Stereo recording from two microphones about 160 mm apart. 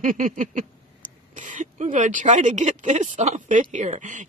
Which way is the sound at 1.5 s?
50° right (ahead or behind).